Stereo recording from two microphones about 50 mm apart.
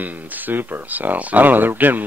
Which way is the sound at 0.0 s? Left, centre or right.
Right.